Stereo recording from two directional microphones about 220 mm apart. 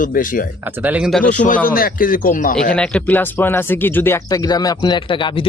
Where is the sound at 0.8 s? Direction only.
5° right (ahead or behind).